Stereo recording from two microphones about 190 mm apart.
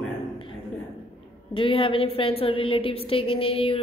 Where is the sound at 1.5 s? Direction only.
25° left (ahead or behind).